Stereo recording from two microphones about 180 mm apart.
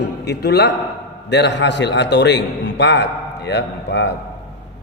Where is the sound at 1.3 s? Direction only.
75° left (ahead or behind).